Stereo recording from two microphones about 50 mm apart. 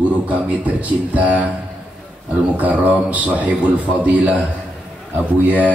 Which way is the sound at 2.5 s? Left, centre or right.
Right.